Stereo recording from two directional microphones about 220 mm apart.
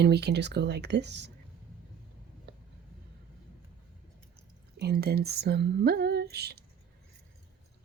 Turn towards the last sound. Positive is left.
turn(degrees=-45)  # may be behind; listen again after turning